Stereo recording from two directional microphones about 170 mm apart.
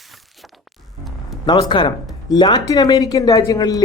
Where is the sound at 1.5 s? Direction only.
25° left (ahead or behind).